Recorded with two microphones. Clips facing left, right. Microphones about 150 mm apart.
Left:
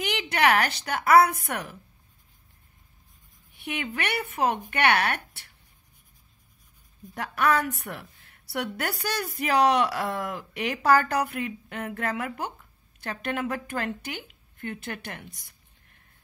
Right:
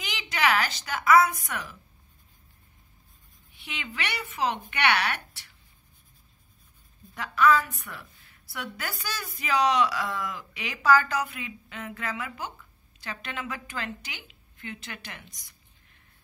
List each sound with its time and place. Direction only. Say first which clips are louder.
0.0 s a woman's voice: left 4 dB; 60° left (ahead or behind)
3.5 s a woman's voice: left 6 dB; 60° left (ahead or behind)
7.2 s a woman's voice: right 2 dB; 65° left (ahead or behind)